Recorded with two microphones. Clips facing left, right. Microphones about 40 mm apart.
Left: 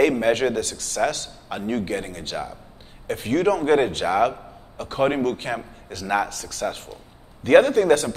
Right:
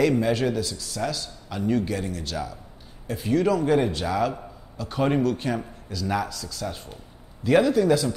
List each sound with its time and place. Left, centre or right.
0.0 s a man's voice: left
3.1 s a man's voice: left